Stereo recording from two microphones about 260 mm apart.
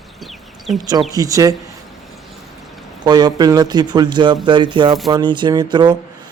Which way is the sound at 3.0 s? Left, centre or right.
Centre.